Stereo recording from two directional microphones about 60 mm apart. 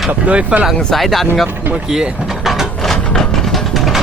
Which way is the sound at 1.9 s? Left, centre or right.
Centre.